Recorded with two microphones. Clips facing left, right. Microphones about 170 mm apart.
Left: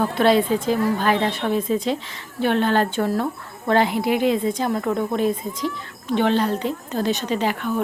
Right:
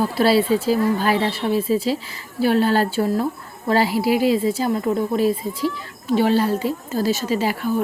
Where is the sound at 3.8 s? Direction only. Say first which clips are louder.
Right 2 dB; 5° right (ahead or behind).